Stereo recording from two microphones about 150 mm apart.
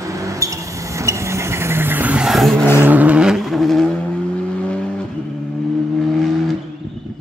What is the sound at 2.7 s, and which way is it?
Vehicle, 10° right (ahead or behind).